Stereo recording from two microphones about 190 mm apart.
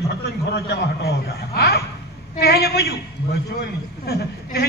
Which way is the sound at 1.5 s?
60° left (ahead or behind).